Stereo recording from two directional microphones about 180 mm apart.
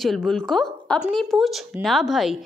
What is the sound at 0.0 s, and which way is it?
A woman's voice, centre (ahead or behind).